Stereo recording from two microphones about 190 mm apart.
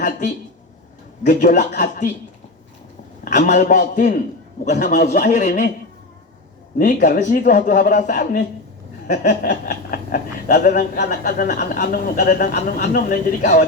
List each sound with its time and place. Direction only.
1.2 s speech: 45° left (ahead or behind)
3.2 s a man's voice: 40° left (ahead or behind)
6.7 s a man's voice: 45° left (ahead or behind)